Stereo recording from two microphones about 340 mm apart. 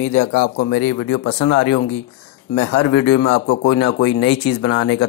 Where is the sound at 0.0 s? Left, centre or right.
Left.